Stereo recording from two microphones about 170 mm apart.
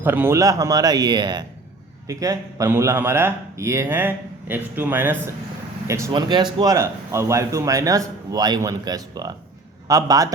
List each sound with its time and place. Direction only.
0.0 s speech: 10° right (ahead or behind)